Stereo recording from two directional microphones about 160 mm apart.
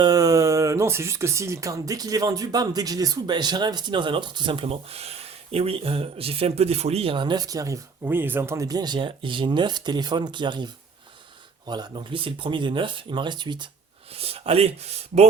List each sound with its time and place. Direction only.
0.0 s speech: 20° right (ahead or behind); by 15.3 s 40° right (ahead or behind)